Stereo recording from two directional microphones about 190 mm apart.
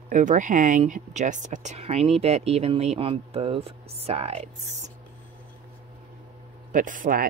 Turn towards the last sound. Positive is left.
turn(degrees=-45)  # may be behind; listen again after turning